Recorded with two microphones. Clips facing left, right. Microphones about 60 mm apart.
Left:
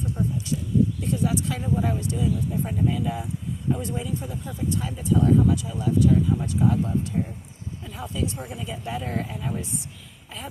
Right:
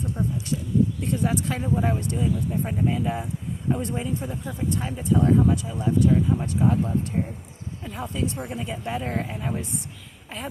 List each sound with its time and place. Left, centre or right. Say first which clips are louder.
1.0 s speech: even; right